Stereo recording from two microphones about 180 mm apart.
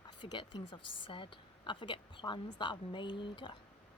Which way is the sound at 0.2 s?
25° left (ahead or behind).